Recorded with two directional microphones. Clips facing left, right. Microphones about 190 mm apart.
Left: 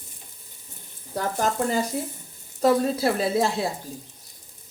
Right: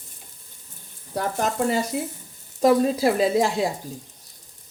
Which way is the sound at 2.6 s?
15° right (ahead or behind).